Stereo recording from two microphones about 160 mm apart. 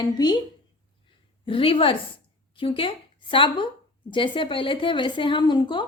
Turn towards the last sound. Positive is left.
turn(degrees=30)  # may be behind; listen again after turning